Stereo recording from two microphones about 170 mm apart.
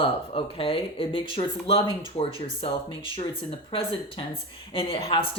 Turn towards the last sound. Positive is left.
turn(degrees=30)  # may be behind; listen again after turning